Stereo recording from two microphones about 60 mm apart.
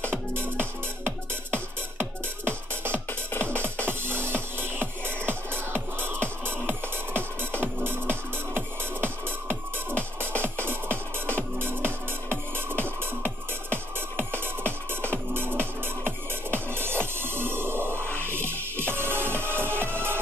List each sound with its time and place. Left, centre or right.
0.0 s music: right
3.1 s music: left
3.8 s music: right